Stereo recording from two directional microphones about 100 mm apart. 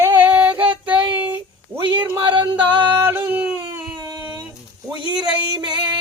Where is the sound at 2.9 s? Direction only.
25° right (ahead or behind).